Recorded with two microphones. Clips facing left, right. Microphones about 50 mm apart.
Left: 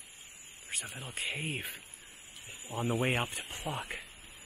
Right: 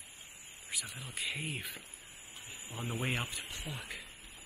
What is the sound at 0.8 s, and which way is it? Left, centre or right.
Speech, left.